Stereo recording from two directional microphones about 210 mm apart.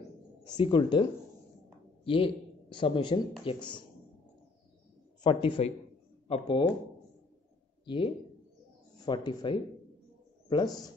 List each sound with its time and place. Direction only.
0.5 s speech: 20° left (ahead or behind)
2.0 s a man's voice: 25° left (ahead or behind)
5.2 s speech: 25° left (ahead or behind)
7.8 s speech: 25° left (ahead or behind)